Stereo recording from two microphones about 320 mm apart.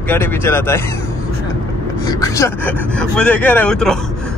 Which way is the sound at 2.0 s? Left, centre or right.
Centre.